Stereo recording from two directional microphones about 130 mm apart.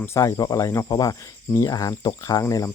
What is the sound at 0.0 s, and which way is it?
Speech, 20° left (ahead or behind).